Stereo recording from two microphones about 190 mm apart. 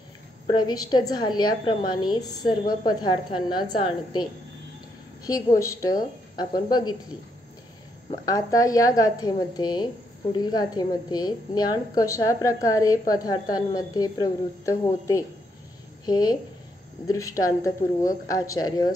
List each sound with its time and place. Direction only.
0.5 s a woman's voice: 20° left (ahead or behind)
8.3 s a woman's voice: 20° left (ahead or behind)
16.1 s a woman's voice: 20° left (ahead or behind)